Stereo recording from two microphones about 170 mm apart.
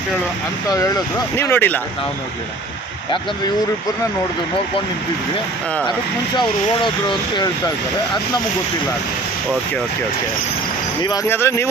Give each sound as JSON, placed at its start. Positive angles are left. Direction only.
{"t": 1.4, "sound": "speech", "side_deg": 10}
{"t": 6.3, "sound": "speech", "side_deg": 30}
{"t": 11.0, "sound": "speech", "side_deg": 20}